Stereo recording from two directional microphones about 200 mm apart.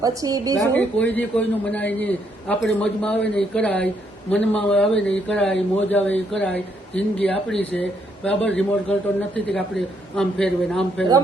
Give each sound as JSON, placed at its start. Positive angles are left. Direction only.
{"t": 0.0, "sound": "a woman's voice", "side_deg": -20}
{"t": 0.6, "sound": "a man's voice", "side_deg": 10}